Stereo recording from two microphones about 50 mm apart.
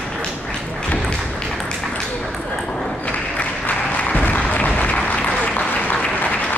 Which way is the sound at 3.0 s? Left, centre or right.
Left.